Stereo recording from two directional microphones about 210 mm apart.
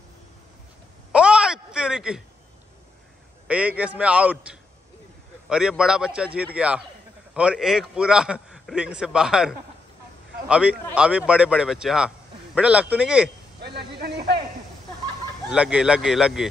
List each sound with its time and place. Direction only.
1.1 s a sound: 5° right (ahead or behind)
3.4 s a man's voice: 5° right (ahead or behind)
13.6 s speech: 50° right (ahead or behind)
15.5 s a man's voice: 5° right (ahead or behind)